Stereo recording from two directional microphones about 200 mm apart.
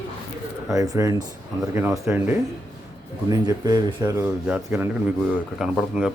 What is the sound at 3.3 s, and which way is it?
A man's voice, 20° right (ahead or behind).